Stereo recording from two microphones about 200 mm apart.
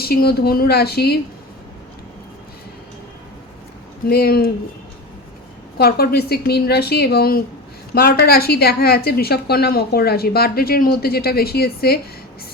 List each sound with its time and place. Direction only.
0.0 s a woman's voice: 50° left (ahead or behind)
4.0 s a woman's voice: 50° left (ahead or behind)
5.7 s a woman's voice: 50° left (ahead or behind)